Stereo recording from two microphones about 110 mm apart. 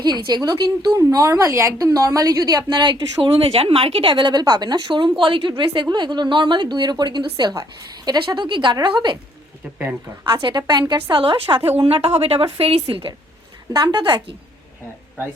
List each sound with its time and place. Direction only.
0.0 s a woman's voice: 40° right (ahead or behind)
10.7 s a woman's voice: 40° right (ahead or behind)
13.7 s a woman's voice: 40° right (ahead or behind)